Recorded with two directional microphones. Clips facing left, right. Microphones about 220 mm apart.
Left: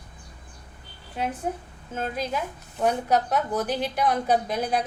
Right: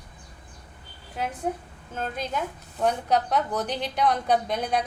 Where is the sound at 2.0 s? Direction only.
5° left (ahead or behind).